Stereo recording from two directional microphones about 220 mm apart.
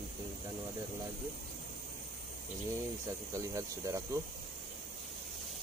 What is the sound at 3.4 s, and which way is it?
Speech, 15° right (ahead or behind).